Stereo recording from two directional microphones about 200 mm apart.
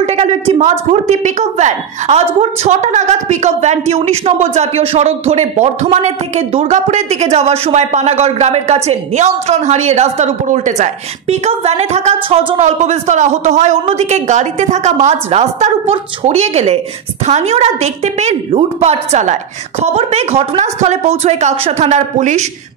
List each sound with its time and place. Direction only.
0.0 s a woman's voice: 30° right (ahead or behind)